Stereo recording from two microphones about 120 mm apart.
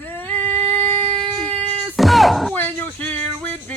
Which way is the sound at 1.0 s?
45° right (ahead or behind).